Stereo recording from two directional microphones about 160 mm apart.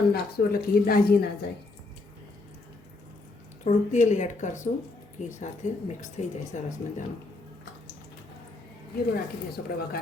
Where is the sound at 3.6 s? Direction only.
50° left (ahead or behind).